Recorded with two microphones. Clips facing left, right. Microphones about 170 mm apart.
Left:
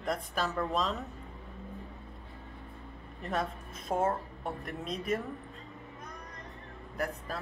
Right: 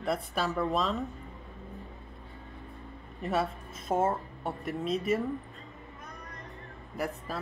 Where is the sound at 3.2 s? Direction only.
5° right (ahead or behind).